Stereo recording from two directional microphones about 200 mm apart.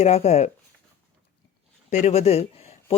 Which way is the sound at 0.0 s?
30° left (ahead or behind).